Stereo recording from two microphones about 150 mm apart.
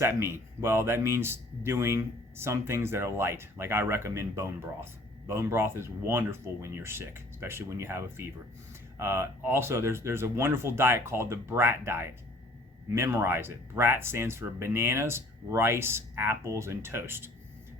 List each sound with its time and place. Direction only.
0.0 s speech: 15° right (ahead or behind)